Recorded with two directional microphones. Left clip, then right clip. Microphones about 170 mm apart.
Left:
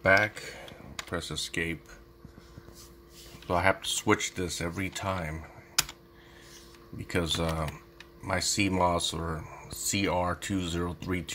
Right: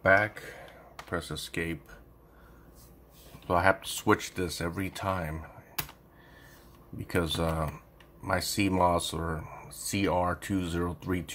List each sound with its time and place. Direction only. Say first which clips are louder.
0.0 s speech: even; 15° left (ahead or behind)
1.1 s speech: left 1 dB; 10° left (ahead or behind)
3.4 s speech: right 1 dB; centre (ahead or behind)
7.1 s speech: even; centre (ahead or behind)